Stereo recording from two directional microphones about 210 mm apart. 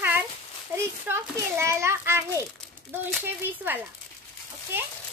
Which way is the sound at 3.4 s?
10° right (ahead or behind).